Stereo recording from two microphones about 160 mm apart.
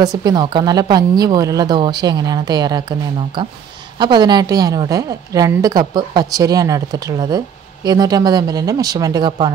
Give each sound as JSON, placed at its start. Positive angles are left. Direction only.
{"t": 0.0, "sound": "a woman's voice", "side_deg": -25}